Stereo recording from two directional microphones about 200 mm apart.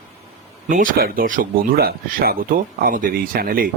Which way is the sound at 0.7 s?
45° right (ahead or behind).